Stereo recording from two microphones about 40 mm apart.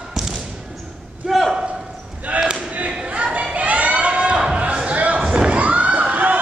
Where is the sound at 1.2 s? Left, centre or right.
Centre.